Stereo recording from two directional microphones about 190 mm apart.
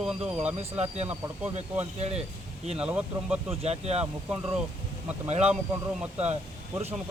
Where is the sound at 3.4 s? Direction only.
35° right (ahead or behind).